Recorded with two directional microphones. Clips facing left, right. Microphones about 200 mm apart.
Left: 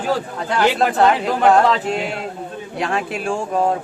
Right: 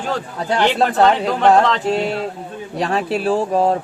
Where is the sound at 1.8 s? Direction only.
35° right (ahead or behind).